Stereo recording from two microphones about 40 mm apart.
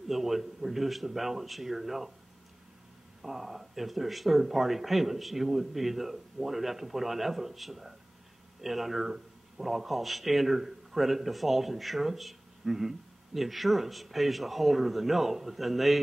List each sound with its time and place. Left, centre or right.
0.1 s speech: centre
3.2 s speech: centre
12.6 s a sound: centre
13.4 s speech: centre